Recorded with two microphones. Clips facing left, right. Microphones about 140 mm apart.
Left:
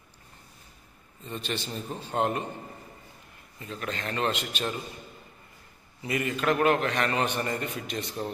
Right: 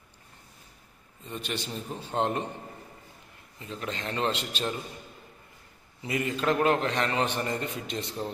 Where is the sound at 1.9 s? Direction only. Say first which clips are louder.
Left 1 dB; 15° left (ahead or behind).